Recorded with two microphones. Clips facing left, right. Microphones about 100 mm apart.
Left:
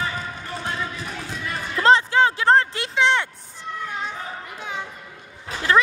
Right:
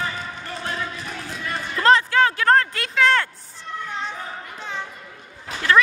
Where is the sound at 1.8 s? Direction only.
25° left (ahead or behind).